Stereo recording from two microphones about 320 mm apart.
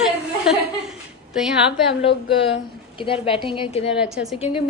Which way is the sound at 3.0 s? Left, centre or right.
Centre.